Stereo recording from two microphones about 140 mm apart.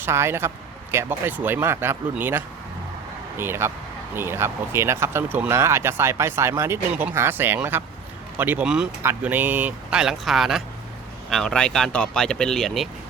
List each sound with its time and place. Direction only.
0.0 s speech: 20° right (ahead or behind); by 12.9 s centre (ahead or behind)